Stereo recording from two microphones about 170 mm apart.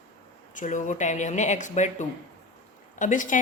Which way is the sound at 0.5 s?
50° left (ahead or behind).